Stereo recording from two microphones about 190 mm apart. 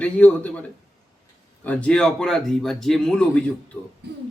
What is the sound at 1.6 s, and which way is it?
A man's voice, 5° left (ahead or behind).